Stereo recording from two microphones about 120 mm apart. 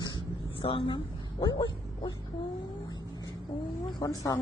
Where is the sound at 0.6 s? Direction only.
45° left (ahead or behind).